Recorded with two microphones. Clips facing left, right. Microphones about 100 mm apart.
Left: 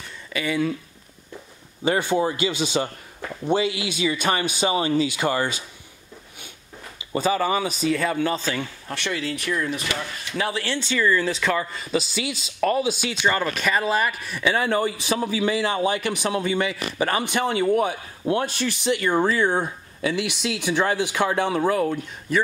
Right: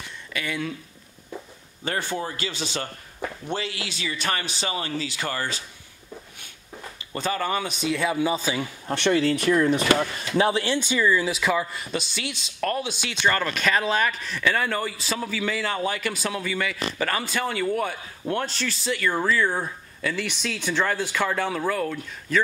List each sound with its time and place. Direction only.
0.3 s speech: 5° left (ahead or behind)
1.9 s speech: 15° left (ahead or behind)
7.0 s speech: 10° left (ahead or behind); by 8.6 s 10° right (ahead or behind)
8.8 s speech: 25° right (ahead or behind)
10.3 s speech: 25° right (ahead or behind); by 22.0 s 25° left (ahead or behind)